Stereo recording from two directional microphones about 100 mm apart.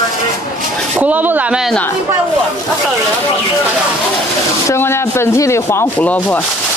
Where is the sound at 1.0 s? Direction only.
15° right (ahead or behind).